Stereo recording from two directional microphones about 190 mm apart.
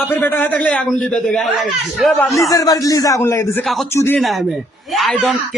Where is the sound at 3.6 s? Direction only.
Centre (ahead or behind).